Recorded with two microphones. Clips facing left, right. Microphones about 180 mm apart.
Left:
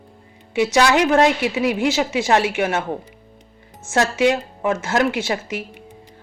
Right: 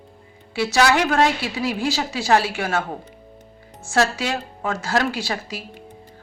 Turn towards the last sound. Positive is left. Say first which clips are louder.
# left 4 dB
turn(degrees=20)  # may be behind; listen again after turning